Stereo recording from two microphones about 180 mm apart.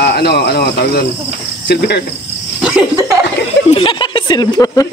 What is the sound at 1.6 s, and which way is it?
Cricket, 65° left (ahead or behind).